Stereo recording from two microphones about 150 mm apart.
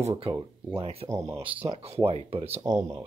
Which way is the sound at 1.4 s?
35° right (ahead or behind).